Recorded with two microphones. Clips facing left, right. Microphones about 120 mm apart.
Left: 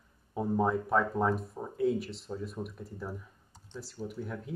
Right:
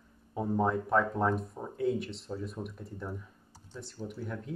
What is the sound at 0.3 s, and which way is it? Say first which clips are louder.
Speech: left 1 dB; centre (ahead or behind).